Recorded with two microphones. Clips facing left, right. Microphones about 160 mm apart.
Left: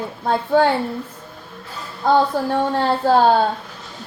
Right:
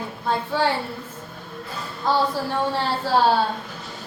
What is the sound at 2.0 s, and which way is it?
A woman's voice, 50° left (ahead or behind).